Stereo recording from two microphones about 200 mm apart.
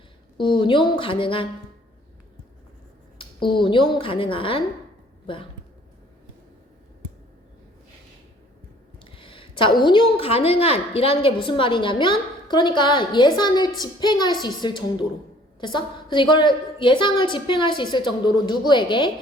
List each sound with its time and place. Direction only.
0.3 s a woman's voice: 25° left (ahead or behind)
3.2 s a woman's voice: 25° left (ahead or behind)
9.0 s a woman's voice: 25° left (ahead or behind)